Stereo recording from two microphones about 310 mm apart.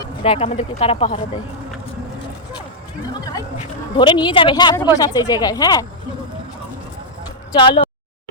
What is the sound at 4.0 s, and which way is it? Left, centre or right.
Speech, centre.